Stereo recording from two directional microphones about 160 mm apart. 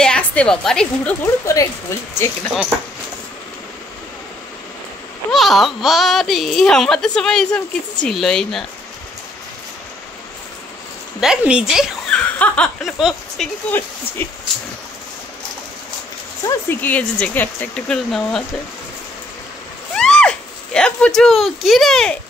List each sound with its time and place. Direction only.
0.0 s a woman's voice: 5° left (ahead or behind)
1.4 s speech: 20° left (ahead or behind)
5.3 s speech: centre (ahead or behind)
11.1 s speech: 5° right (ahead or behind)
12.1 s speech: 10° left (ahead or behind)
13.7 s speech: 10° left (ahead or behind)
16.4 s speech: 15° left (ahead or behind)
20.0 s speech: 5° left (ahead or behind)